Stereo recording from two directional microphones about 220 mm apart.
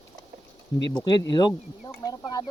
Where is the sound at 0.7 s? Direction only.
20° left (ahead or behind).